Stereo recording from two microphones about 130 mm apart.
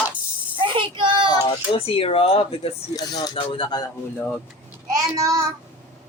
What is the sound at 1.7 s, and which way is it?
Speech, 45° left (ahead or behind).